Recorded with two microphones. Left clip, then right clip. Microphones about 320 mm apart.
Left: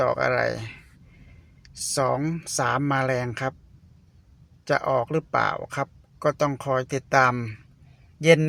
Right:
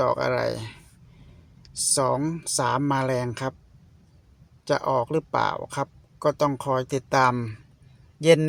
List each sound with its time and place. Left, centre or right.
0.0 s speech: centre
4.6 s speech: centre